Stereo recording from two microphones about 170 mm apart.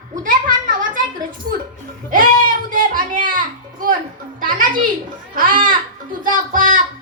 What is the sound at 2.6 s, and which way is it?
Music, 55° right (ahead or behind).